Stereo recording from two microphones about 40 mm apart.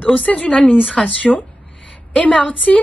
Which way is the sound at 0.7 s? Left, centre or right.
Centre.